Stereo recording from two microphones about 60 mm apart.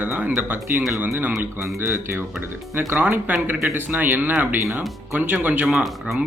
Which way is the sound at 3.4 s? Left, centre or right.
Right.